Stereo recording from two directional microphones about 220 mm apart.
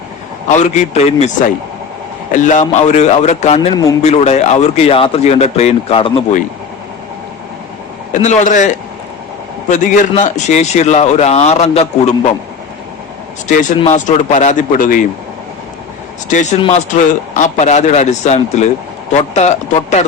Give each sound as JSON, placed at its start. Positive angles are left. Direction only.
{"t": 0.4, "sound": "a man's voice", "side_deg": 30}
{"t": 8.1, "sound": "a man's voice", "side_deg": 30}
{"t": 13.5, "sound": "a man's voice", "side_deg": 35}
{"t": 16.3, "sound": "a man's voice", "side_deg": 35}